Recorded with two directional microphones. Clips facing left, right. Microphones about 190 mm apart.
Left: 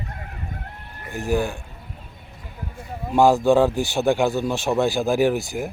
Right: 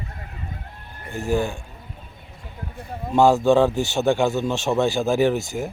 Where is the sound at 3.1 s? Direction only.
15° left (ahead or behind).